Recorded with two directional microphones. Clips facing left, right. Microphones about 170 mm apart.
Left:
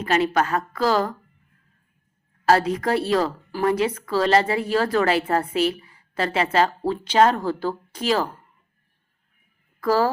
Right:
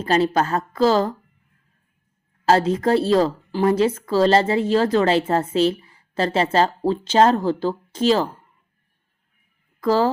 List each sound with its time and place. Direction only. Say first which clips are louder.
0.0 s a woman's voice: right 2 dB; 30° right (ahead or behind)
2.5 s a woman's voice: right 2 dB; 25° right (ahead or behind)
9.8 s speech: right 2 dB; 20° right (ahead or behind)